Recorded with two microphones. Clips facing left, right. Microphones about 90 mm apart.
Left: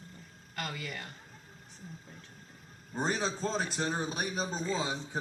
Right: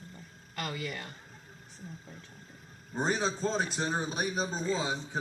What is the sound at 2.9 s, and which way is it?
A man's voice, 15° right (ahead or behind).